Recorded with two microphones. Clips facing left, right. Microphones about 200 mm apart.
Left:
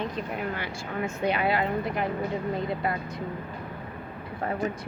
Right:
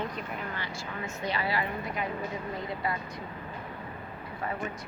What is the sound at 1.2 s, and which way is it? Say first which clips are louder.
Speech: left 6 dB; 60° left (ahead or behind).